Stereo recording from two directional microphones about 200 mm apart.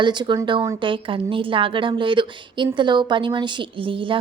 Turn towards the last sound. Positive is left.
turn(degrees=-25)  # may be behind; listen again after turning